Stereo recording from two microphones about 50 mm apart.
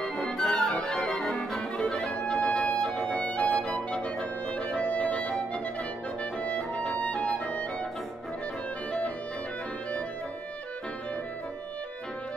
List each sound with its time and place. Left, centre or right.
0.0 s music: centre